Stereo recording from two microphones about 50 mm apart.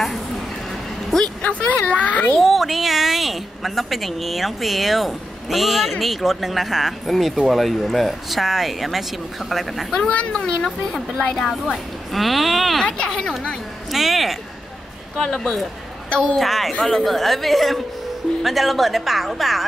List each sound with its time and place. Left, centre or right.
0.7 s a sound: centre
1.4 s a woman's voice: left
2.4 s a woman's voice: centre
9.9 s speech: centre
11.6 s a woman's voice: centre
12.8 s speech: left
13.8 s a woman's voice: centre
15.1 s speech: centre
16.1 s speech: left
16.3 s a woman's voice: centre